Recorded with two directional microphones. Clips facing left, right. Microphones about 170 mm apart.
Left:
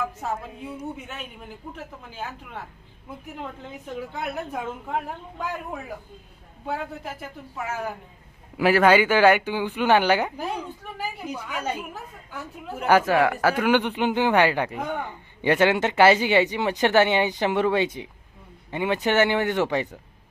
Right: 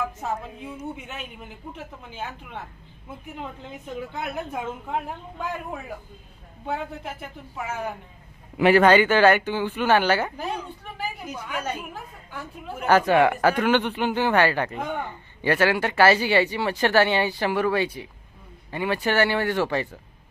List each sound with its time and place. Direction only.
0.0 s a woman's voice: centre (ahead or behind); by 14.8 s 15° left (ahead or behind)
14.8 s a woman's voice: centre (ahead or behind)
15.0 s speech: 15° left (ahead or behind)